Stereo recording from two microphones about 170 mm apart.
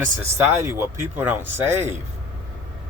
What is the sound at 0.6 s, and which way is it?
Speech, 15° right (ahead or behind).